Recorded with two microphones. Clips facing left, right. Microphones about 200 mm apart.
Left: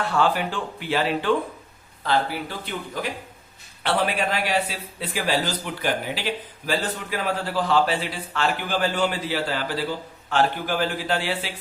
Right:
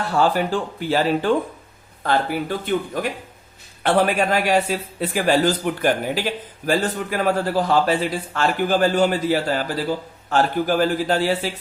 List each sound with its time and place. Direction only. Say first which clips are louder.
0.1 s a man's voice: right 6 dB; 40° right (ahead or behind)